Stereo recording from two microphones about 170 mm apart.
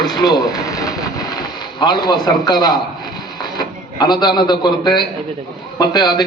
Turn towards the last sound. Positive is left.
turn(degrees=25)  # may be behind; listen again after turning